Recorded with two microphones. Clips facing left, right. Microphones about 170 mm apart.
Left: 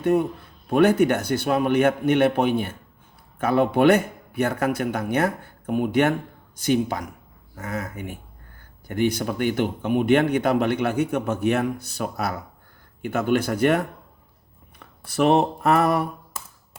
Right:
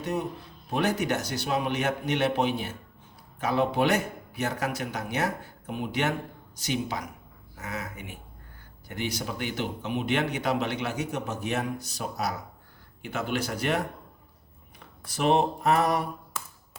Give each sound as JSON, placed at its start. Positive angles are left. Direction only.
{"t": 0.0, "sound": "a man's voice", "side_deg": 55}
{"t": 15.0, "sound": "a man's voice", "side_deg": 60}